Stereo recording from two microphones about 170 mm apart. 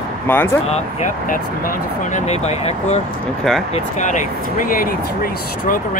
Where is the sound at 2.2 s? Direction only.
40° left (ahead or behind); by 4.9 s 55° left (ahead or behind).